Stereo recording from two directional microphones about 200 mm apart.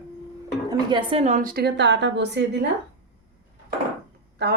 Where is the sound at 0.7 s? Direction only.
25° right (ahead or behind); by 2.6 s 60° right (ahead or behind).